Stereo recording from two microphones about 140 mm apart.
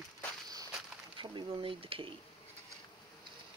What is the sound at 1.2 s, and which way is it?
Speech, 35° right (ahead or behind).